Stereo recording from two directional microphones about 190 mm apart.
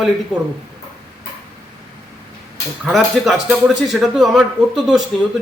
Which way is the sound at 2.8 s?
Centre (ahead or behind).